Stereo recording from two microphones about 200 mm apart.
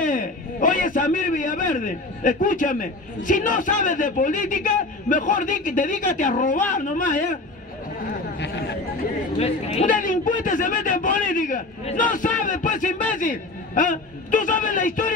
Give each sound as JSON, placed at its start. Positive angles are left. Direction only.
{"t": 0.0, "sound": "a man's voice", "side_deg": 40}
{"t": 9.4, "sound": "a man's voice", "side_deg": 30}